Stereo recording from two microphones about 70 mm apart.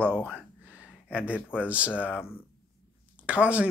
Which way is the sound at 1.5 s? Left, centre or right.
Centre.